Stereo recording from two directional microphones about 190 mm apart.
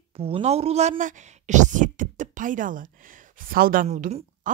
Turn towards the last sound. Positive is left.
turn(degrees=-40)  # may be behind; listen again after turning